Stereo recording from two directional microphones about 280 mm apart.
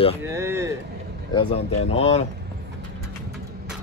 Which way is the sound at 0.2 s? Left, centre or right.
Centre.